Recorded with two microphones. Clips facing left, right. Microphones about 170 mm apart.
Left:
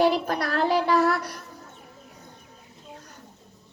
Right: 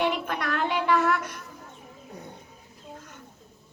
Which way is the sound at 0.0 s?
35° left (ahead or behind).